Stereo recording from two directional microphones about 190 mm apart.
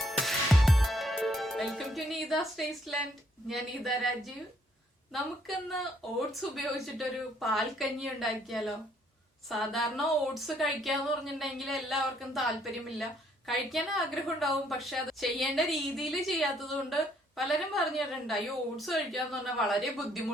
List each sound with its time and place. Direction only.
0.1 s music: centre (ahead or behind)
3.5 s a woman's voice: centre (ahead or behind)
5.1 s a woman's voice: centre (ahead or behind)
13.5 s a woman's voice: centre (ahead or behind)